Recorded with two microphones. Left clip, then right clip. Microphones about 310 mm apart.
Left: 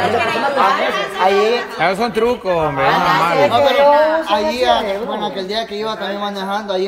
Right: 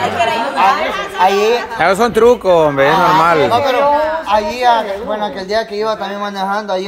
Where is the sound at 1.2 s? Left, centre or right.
Right.